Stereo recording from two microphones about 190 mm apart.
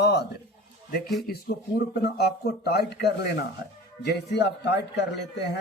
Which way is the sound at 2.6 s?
60° left (ahead or behind).